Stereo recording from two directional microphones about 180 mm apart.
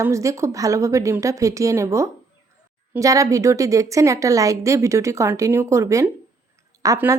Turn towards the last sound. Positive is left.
turn(degrees=-15)  # may be behind; listen again after turning